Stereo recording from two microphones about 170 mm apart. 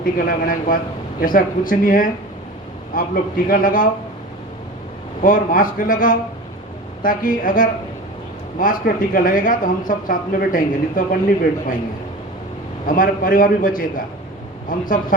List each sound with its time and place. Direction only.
0.0 s a man's voice: 55° left (ahead or behind)
5.2 s speech: 50° left (ahead or behind)
12.8 s speech: 55° left (ahead or behind)